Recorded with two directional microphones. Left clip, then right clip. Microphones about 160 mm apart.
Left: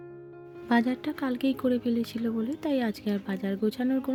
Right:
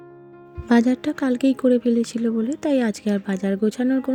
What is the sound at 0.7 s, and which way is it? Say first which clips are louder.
Speech: right 7 dB; 45° right (ahead or behind).